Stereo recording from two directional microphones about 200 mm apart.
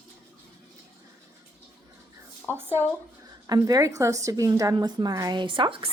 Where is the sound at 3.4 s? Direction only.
20° right (ahead or behind).